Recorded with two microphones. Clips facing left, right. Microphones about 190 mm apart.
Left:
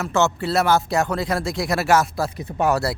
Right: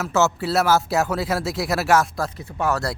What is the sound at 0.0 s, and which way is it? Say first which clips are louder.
Speech: even; 5° right (ahead or behind).